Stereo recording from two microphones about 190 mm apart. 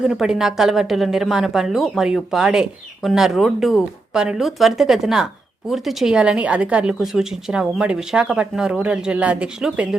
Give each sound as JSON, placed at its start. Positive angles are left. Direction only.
{"t": 0.1, "sound": "speech", "side_deg": -5}